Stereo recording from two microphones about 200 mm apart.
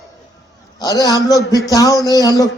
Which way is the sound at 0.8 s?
20° left (ahead or behind).